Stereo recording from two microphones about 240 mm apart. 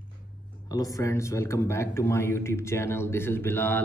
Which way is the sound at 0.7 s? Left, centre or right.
Centre.